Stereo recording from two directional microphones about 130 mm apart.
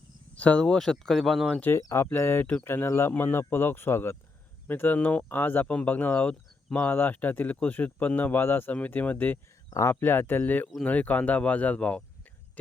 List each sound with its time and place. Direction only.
0.3 s speech: 10° left (ahead or behind)
1.7 s speech: 20° left (ahead or behind)
9.6 s speech: 25° left (ahead or behind)